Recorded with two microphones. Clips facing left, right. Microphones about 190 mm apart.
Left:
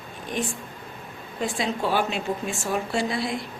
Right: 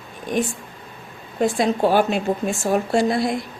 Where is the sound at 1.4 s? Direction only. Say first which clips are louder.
Right 8 dB; 45° right (ahead or behind).